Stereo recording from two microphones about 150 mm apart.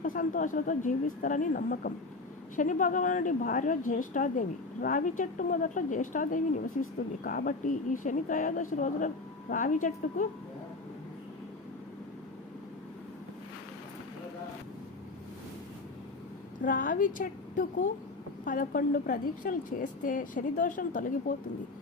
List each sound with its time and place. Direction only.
0.0 s a woman's voice: 60° left (ahead or behind)
2.6 s a woman's voice: 60° left (ahead or behind)
16.6 s a woman's voice: 60° left (ahead or behind)